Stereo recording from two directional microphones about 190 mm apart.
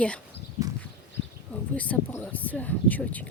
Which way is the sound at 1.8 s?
10° left (ahead or behind).